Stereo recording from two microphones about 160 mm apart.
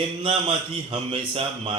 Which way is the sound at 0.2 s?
35° right (ahead or behind).